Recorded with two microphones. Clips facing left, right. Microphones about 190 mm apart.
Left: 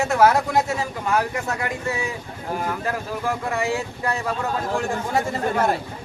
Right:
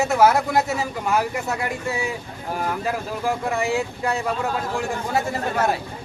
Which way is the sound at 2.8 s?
15° right (ahead or behind).